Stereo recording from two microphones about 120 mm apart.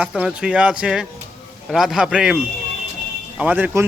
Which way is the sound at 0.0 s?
5° right (ahead or behind).